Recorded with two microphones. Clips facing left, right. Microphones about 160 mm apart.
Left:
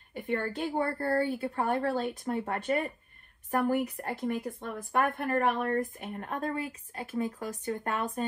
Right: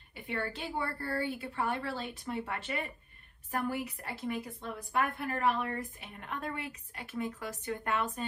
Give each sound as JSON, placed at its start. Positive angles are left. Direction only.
{"t": 0.1, "sound": "a woman's voice", "side_deg": 45}